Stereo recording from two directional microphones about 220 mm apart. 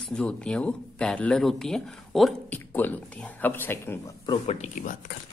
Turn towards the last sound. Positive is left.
turn(degrees=40)  # may be behind; listen again after turning